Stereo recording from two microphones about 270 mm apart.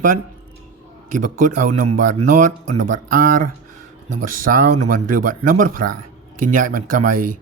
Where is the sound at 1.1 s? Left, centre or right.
Right.